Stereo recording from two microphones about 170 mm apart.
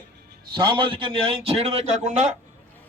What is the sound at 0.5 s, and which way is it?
A man's voice, 30° right (ahead or behind).